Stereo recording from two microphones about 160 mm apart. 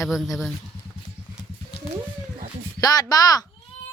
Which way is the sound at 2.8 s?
25° left (ahead or behind).